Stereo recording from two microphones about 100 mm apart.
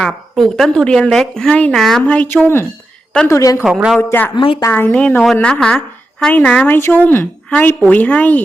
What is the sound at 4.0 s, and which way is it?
Speech, 20° left (ahead or behind).